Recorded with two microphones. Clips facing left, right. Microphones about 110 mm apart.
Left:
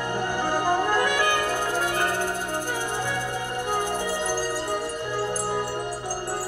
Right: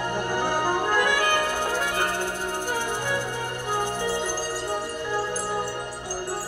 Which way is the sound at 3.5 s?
45° left (ahead or behind).